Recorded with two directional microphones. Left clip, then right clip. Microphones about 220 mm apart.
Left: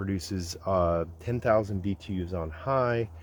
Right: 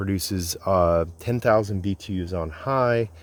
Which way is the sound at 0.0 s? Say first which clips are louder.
Right 6 dB; 50° right (ahead or behind).